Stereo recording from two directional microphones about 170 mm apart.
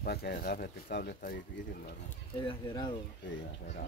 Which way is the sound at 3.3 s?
90° left.